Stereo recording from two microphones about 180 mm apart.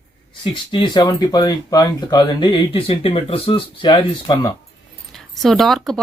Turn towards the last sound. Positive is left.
turn(degrees=0)  # may be behind; listen again after turning